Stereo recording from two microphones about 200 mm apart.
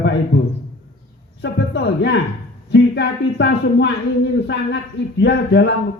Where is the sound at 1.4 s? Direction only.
55° left (ahead or behind).